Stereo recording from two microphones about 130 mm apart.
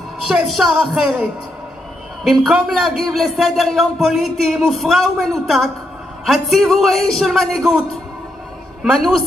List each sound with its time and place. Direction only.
0.3 s a man's voice: 5° right (ahead or behind)